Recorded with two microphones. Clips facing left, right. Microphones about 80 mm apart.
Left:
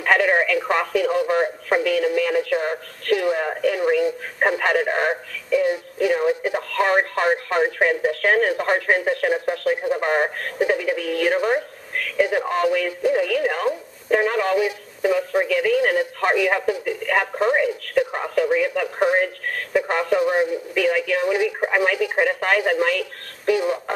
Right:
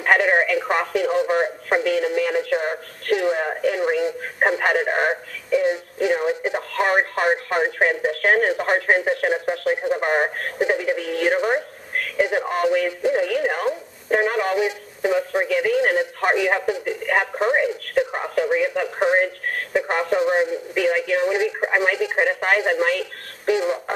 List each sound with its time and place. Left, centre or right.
0.0 s speech: centre
17.4 s radio: centre
19.7 s speech: centre